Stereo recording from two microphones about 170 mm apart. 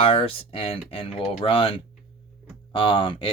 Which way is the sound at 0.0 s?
35° left (ahead or behind).